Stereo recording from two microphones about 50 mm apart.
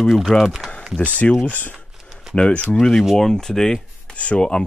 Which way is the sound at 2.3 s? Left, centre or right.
Left.